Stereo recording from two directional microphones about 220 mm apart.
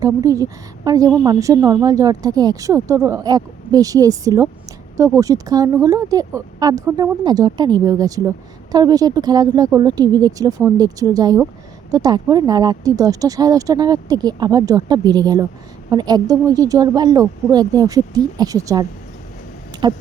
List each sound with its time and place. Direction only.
0.0 s speech: 15° right (ahead or behind)